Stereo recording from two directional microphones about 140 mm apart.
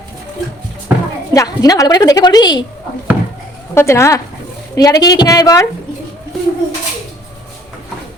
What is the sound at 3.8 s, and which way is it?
A woman's voice, 20° left (ahead or behind).